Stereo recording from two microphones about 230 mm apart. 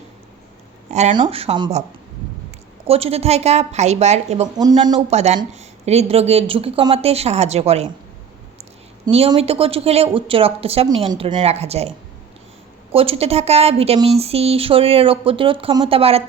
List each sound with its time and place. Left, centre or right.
0.9 s speech: right
2.8 s speech: right
4.5 s speech: centre
5.1 s speech: right
9.0 s speech: right